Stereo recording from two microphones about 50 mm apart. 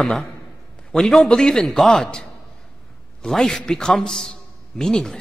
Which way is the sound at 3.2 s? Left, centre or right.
Centre.